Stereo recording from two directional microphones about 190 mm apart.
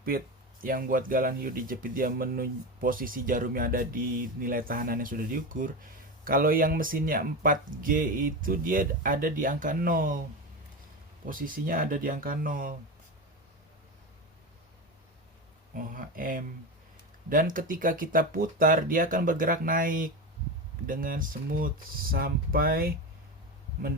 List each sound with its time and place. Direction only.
0.6 s speech: 50° right (ahead or behind)
11.3 s speech: 45° right (ahead or behind)
15.7 s speech: 45° right (ahead or behind)